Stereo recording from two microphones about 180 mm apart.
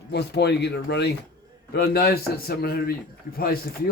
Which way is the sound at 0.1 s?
65° left (ahead or behind).